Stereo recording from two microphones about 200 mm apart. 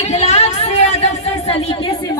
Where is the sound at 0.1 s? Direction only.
30° left (ahead or behind).